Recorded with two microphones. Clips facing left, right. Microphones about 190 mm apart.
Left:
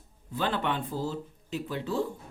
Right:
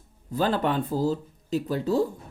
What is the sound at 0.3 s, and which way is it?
Speech, 40° right (ahead or behind).